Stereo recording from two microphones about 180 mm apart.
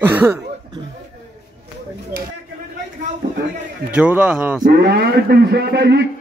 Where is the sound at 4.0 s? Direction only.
5° right (ahead or behind).